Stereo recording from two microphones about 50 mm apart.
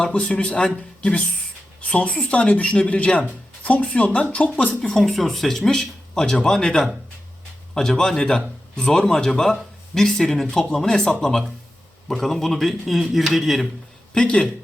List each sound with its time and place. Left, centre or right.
0.1 s speech: left
4.7 s speech: centre
14.1 s speech: centre